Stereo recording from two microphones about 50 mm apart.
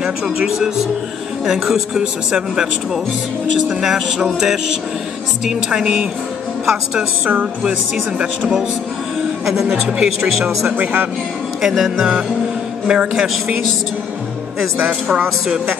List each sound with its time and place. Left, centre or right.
0.0 s speech: centre
1.4 s speech: centre
9.5 s speech: centre
10.8 s speech: right
11.6 s speech: centre
12.0 s speech: centre